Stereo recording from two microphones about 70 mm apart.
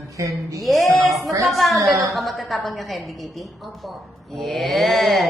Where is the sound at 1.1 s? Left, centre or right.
Right.